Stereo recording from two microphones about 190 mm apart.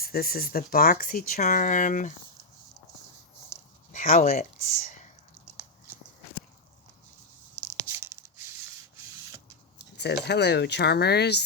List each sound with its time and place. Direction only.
0.0 s speech: 50° left (ahead or behind)
3.9 s speech: 40° left (ahead or behind)
7.9 s a sound: 15° right (ahead or behind)
9.7 s speech: 60° left (ahead or behind)